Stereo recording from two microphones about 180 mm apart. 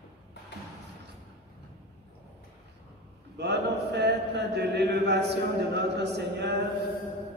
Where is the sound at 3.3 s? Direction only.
70° right (ahead or behind).